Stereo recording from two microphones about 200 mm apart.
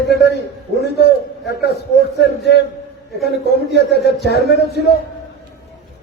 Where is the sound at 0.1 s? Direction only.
55° left (ahead or behind).